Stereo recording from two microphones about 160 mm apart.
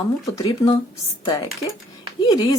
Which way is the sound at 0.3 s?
20° left (ahead or behind).